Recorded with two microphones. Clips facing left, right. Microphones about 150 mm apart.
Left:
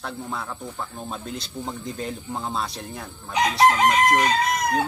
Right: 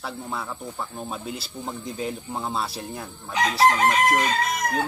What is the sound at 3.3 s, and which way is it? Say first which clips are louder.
Chicken: left 1 dB; 20° left (ahead or behind).